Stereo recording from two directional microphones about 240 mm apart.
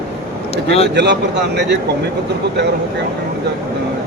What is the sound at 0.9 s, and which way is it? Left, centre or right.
Speech, right.